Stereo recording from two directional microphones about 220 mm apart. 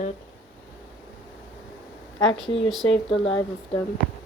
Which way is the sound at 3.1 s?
25° left (ahead or behind).